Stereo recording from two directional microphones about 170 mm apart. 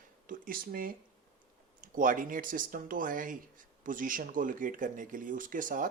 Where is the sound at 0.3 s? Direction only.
55° right (ahead or behind).